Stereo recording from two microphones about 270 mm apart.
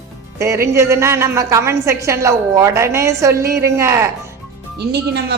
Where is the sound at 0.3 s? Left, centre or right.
Centre.